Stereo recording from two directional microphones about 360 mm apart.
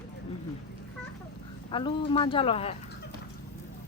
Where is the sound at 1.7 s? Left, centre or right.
Centre.